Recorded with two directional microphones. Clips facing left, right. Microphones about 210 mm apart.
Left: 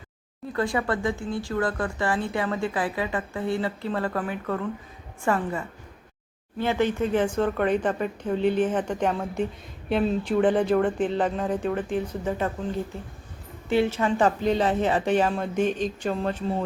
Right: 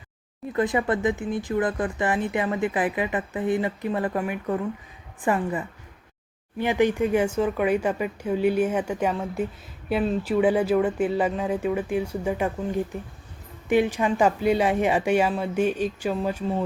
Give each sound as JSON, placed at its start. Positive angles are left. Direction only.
{"t": 0.5, "sound": "speech", "side_deg": -20}
{"t": 13.7, "sound": "speech", "side_deg": -15}